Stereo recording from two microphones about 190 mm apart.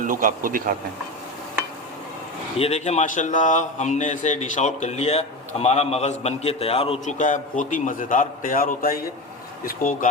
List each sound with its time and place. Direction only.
0.0 s a man's voice: 45° right (ahead or behind)
2.6 s a man's voice: 35° left (ahead or behind)